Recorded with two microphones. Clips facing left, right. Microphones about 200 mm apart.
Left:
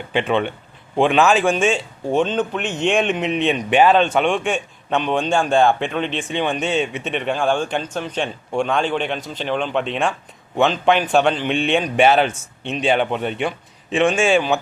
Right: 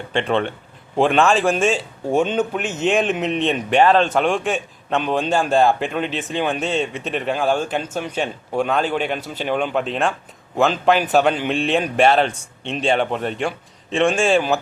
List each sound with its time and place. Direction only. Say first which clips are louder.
0.1 s a man's voice: left 1 dB; 5° left (ahead or behind)